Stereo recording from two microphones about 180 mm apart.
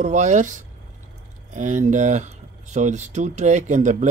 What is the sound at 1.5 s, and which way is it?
Speech, 45° right (ahead or behind).